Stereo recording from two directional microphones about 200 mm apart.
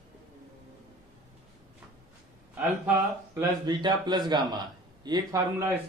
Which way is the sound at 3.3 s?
20° right (ahead or behind).